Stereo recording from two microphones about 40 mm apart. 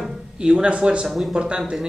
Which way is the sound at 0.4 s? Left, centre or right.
Right.